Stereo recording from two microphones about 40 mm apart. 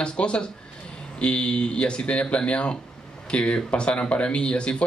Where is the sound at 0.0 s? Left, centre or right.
Left.